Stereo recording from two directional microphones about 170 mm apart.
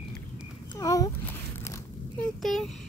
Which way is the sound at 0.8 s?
20° left (ahead or behind).